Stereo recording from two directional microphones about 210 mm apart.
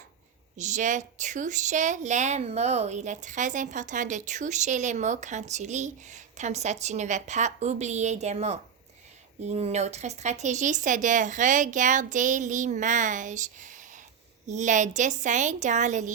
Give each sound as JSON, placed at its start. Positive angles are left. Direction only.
{"t": 0.5, "sound": "speech", "side_deg": -35}